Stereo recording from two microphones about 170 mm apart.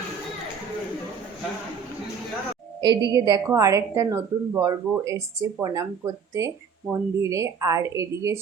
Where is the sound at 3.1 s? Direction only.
25° right (ahead or behind).